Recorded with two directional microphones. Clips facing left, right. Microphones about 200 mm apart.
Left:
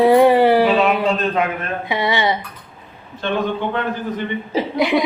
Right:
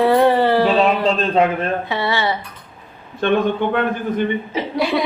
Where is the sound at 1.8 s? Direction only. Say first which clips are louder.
Left 1 dB; 15° left (ahead or behind).